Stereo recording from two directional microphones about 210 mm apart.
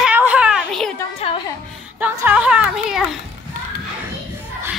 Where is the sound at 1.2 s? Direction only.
30° left (ahead or behind).